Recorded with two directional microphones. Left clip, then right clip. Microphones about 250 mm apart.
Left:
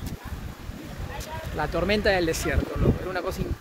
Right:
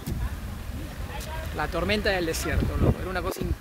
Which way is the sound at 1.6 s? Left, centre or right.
Centre.